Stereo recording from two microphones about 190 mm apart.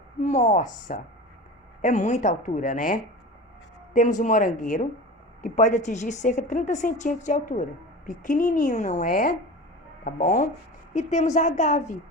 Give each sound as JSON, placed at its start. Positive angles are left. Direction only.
{"t": 0.2, "sound": "a woman's voice", "side_deg": 35}